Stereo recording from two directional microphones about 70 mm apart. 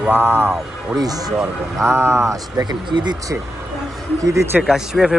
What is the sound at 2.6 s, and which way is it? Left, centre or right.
Speech, right.